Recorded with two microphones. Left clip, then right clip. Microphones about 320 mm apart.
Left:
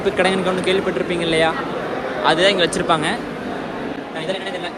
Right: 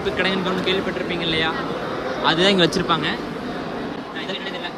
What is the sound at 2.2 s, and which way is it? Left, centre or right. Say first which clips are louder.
Speech: left 2 dB; centre.